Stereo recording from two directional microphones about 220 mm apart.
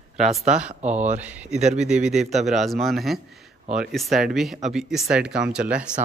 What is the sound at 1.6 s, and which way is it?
Speech, 30° right (ahead or behind).